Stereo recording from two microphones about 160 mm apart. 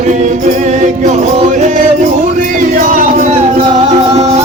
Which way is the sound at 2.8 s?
55° right (ahead or behind).